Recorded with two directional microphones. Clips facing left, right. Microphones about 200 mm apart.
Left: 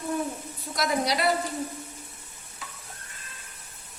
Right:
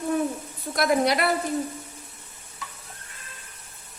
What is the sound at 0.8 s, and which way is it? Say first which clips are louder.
Speech: right 5 dB; 55° right (ahead or behind).